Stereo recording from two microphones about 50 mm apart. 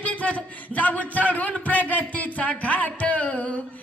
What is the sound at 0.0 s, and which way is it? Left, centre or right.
Speech, left.